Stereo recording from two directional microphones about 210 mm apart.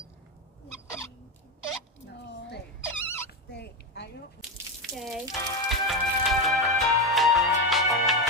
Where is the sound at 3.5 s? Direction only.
55° left (ahead or behind).